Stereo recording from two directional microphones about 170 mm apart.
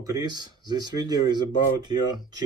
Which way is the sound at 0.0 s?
25° right (ahead or behind).